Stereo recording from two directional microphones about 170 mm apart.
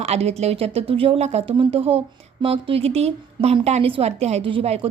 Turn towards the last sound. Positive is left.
turn(degrees=-35)  # may be behind; listen again after turning